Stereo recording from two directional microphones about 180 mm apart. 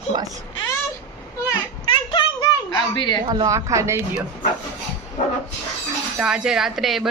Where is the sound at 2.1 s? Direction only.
25° left (ahead or behind).